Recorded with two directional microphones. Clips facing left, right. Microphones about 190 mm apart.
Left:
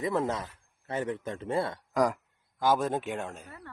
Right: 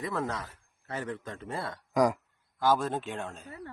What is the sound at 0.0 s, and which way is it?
Speech, 20° left (ahead or behind).